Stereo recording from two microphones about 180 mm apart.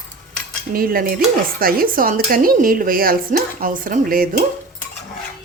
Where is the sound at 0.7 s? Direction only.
55° right (ahead or behind).